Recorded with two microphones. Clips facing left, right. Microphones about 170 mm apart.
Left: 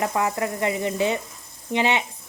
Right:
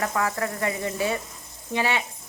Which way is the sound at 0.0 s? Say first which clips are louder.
Left 2 dB; 20° left (ahead or behind).